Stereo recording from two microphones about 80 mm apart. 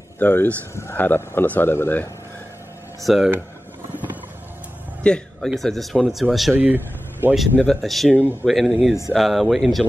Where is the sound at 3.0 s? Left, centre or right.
Centre.